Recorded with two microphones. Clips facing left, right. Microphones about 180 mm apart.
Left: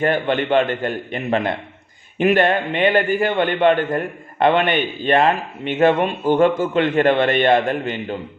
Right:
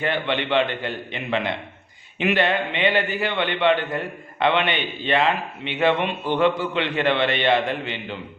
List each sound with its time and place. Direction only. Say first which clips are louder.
0.0 s a man's voice: left 5 dB; 45° left (ahead or behind)